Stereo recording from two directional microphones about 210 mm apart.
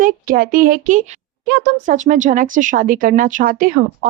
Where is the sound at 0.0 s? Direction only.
40° right (ahead or behind).